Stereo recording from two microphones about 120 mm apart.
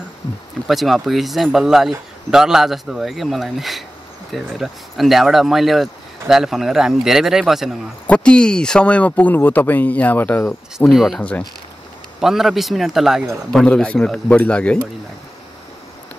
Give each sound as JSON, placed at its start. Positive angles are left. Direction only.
{"t": 0.7, "sound": "speech", "side_deg": 0}
{"t": 8.1, "sound": "speech", "side_deg": 10}
{"t": 10.9, "sound": "speech", "side_deg": 0}
{"t": 11.1, "sound": "speech", "side_deg": 10}
{"t": 12.2, "sound": "speech", "side_deg": -5}